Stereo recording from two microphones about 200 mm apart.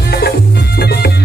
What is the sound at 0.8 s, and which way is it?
Music, 55° left (ahead or behind).